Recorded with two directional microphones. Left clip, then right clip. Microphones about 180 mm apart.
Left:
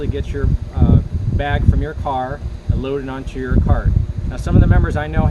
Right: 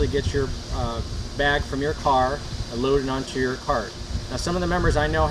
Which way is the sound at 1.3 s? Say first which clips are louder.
Even; 10° left (ahead or behind).